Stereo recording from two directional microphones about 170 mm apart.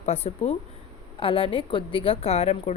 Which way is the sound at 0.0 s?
40° left (ahead or behind).